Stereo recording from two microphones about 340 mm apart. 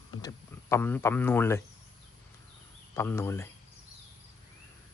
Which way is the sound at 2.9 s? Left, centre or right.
Centre.